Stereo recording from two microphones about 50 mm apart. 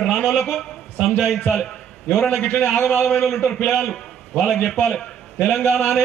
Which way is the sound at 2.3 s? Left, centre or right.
Left.